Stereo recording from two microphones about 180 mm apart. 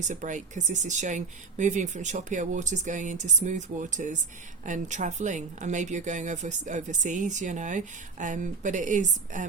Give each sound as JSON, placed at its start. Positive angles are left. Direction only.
{"t": 0.1, "sound": "speech", "side_deg": -45}